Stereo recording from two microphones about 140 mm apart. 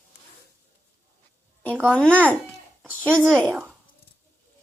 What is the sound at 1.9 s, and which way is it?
Speech, 10° left (ahead or behind).